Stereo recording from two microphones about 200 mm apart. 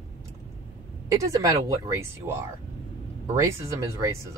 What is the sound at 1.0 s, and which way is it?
Speech, 15° right (ahead or behind).